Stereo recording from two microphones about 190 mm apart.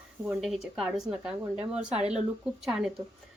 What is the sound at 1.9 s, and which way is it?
Speech, 35° right (ahead or behind).